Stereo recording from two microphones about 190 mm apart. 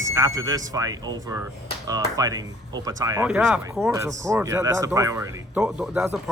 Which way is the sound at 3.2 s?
5° right (ahead or behind).